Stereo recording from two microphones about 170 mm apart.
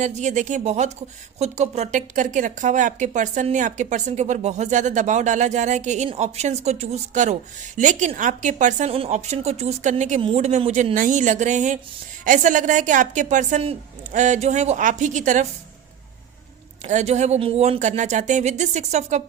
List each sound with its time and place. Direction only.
0.0 s speech: 45° right (ahead or behind)
10.2 s speech: 35° right (ahead or behind)
16.8 s speech: 40° right (ahead or behind)